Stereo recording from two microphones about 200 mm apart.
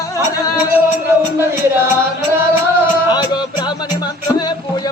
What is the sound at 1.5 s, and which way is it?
Music, 10° right (ahead or behind).